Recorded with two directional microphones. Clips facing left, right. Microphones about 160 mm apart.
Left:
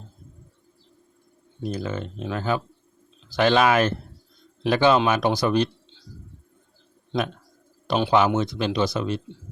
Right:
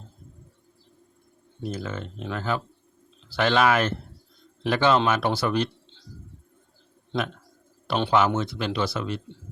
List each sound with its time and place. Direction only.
1.6 s speech: 15° left (ahead or behind)
7.9 s speech: 15° left (ahead or behind)